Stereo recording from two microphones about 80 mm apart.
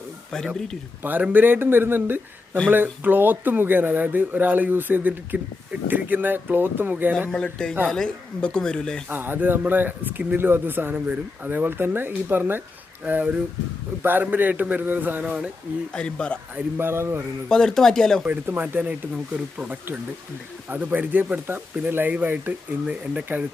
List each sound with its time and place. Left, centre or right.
0.3 s speech: centre
1.0 s speech: right
7.3 s speech: centre
9.0 s speech: right
15.9 s speech: centre
16.6 s speech: right
17.5 s speech: centre
18.3 s speech: right